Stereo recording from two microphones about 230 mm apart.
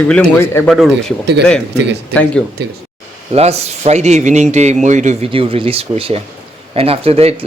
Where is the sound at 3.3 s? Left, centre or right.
Right.